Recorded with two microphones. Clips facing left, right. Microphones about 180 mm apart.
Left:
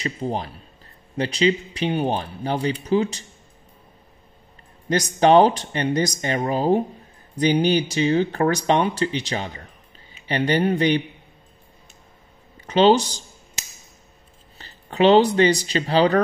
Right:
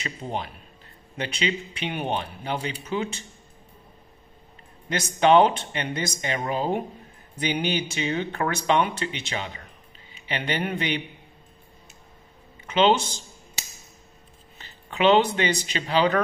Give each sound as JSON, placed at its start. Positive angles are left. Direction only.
{"t": 0.0, "sound": "speech", "side_deg": 35}
{"t": 4.8, "sound": "speech", "side_deg": 40}
{"t": 12.6, "sound": "speech", "side_deg": 35}
{"t": 14.6, "sound": "speech", "side_deg": 40}